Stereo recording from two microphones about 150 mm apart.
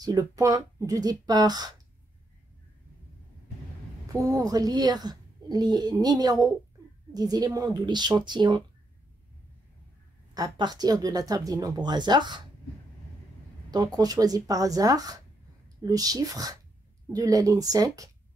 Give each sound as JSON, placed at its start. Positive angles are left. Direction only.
{"t": 0.0, "sound": "a woman's voice", "side_deg": -25}
{"t": 4.1, "sound": "a woman's voice", "side_deg": -20}
{"t": 10.3, "sound": "a woman's voice", "side_deg": -25}
{"t": 13.7, "sound": "a woman's voice", "side_deg": -25}